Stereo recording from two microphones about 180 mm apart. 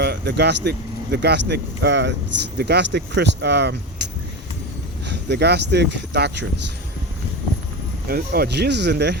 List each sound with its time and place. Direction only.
0.0 s speech: 65° right (ahead or behind)
5.0 s speech: 70° right (ahead or behind)
8.0 s speech: 55° right (ahead or behind)